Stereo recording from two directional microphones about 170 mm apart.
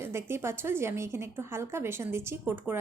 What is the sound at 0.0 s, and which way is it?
A woman's voice, 15° right (ahead or behind).